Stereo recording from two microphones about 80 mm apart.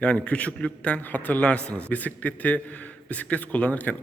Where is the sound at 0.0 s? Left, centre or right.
Centre.